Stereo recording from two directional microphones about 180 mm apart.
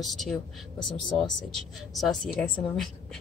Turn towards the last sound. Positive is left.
turn(degrees=0)  # may be behind; listen again after turning